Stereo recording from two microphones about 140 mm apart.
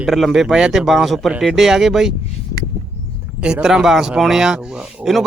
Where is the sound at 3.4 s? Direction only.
5° right (ahead or behind).